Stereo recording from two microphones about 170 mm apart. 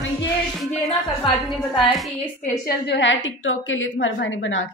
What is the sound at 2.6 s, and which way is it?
A woman's voice, 85° left.